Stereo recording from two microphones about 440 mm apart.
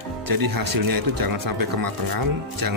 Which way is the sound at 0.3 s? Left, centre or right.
Right.